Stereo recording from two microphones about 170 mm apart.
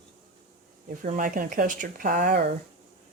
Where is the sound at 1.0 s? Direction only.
55° right (ahead or behind).